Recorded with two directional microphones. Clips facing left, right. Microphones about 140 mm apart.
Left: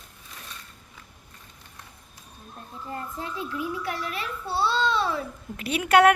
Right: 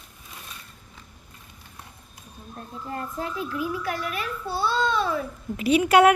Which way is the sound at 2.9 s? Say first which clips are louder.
Right 3 dB; 25° left (ahead or behind).